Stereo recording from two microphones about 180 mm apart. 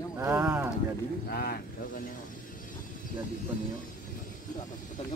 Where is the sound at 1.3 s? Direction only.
60° left (ahead or behind).